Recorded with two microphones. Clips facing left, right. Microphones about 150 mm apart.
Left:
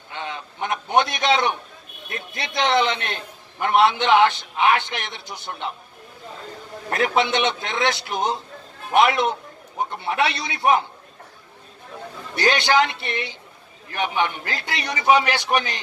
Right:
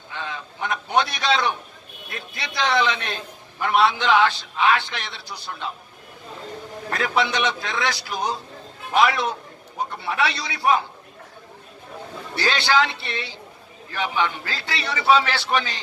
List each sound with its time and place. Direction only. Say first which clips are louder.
0.1 s a sound: left 1 dB; 20° left (ahead or behind)
2.3 s a man's voice: left 2 dB; 20° left (ahead or behind)
6.9 s a man's voice: left 3 dB; 20° left (ahead or behind)
12.3 s a man's voice: left 2 dB; 20° left (ahead or behind)